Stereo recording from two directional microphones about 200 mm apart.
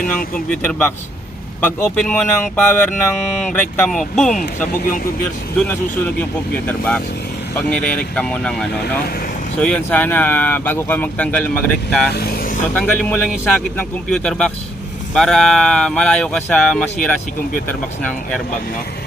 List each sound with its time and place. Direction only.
0.5 s speech: 5° left (ahead or behind)
4.6 s speech: 45° left (ahead or behind)
5.5 s speech: 10° left (ahead or behind)
9.0 s speech: 50° left (ahead or behind)
9.6 s speech: 5° left (ahead or behind)
12.1 s vehicle: 50° left (ahead or behind)
12.7 s speech: 5° left (ahead or behind)